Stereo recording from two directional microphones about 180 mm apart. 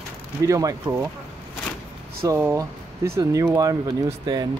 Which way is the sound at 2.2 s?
15° right (ahead or behind).